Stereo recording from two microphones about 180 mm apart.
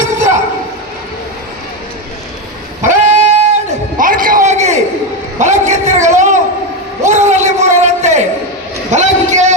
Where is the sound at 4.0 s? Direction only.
50° right (ahead or behind).